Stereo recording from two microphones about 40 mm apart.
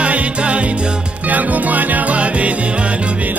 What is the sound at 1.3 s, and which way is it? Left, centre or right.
Music, right.